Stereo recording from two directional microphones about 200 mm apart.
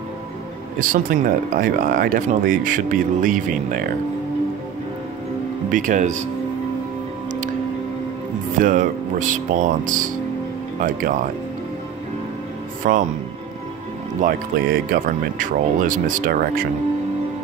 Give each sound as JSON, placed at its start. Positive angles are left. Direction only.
{"t": 0.7, "sound": "speech", "side_deg": -45}
{"t": 5.7, "sound": "speech", "side_deg": -40}
{"t": 8.5, "sound": "speech", "side_deg": -40}
{"t": 12.8, "sound": "speech", "side_deg": -40}
{"t": 14.2, "sound": "speech", "side_deg": -45}